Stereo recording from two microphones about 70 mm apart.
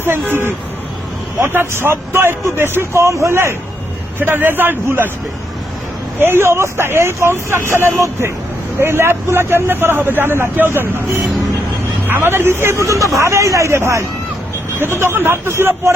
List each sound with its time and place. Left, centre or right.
0.0 s speech: right
4.2 s speech: right
6.1 s speech: right
12.0 s speech: right